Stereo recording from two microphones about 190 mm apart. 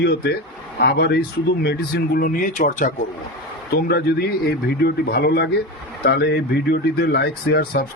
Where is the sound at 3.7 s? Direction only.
55° left (ahead or behind).